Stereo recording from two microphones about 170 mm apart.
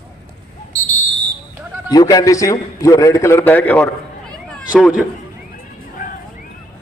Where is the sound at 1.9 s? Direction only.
25° left (ahead or behind).